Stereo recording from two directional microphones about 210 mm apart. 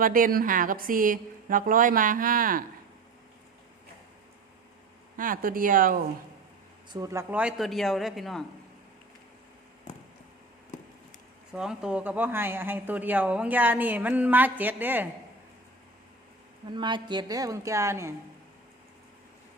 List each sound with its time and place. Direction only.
0.0 s a woman's voice: 40° right (ahead or behind)
5.1 s a woman's voice: 40° right (ahead or behind)
6.9 s speech: 15° right (ahead or behind)
11.5 s speech: 5° right (ahead or behind)
16.6 s speech: 20° right (ahead or behind)